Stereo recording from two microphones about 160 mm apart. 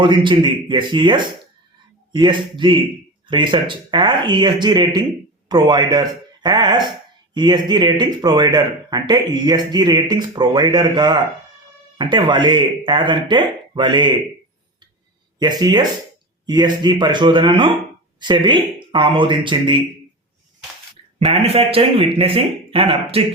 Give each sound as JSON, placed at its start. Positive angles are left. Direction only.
{"t": 0.0, "sound": "speech", "side_deg": -30}
{"t": 15.4, "sound": "speech", "side_deg": -25}
{"t": 21.2, "sound": "speech", "side_deg": -40}